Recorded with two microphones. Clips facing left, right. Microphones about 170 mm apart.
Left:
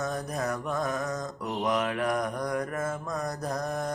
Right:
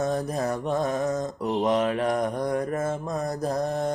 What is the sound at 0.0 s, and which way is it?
Mantra, 30° right (ahead or behind).